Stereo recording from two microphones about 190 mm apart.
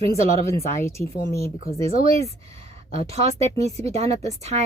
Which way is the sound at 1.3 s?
55° left (ahead or behind).